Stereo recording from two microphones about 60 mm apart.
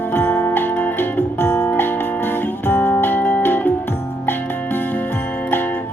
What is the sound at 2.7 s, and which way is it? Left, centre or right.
Music, left.